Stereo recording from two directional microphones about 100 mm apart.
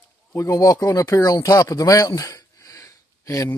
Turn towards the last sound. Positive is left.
turn(degrees=30)  # may be behind; listen again after turning